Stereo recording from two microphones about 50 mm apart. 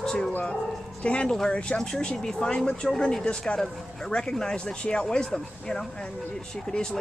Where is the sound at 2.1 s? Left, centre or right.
Centre.